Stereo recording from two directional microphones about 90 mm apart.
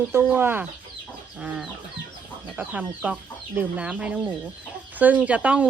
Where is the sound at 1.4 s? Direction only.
10° right (ahead or behind).